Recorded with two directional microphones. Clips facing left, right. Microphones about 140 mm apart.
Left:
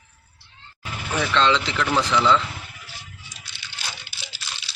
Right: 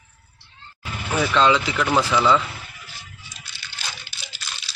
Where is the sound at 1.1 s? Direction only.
10° right (ahead or behind).